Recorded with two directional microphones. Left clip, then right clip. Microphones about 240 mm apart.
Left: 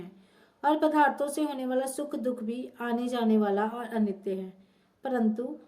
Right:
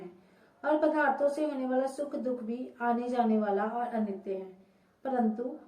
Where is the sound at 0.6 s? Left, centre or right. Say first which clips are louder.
Left 3 dB; left.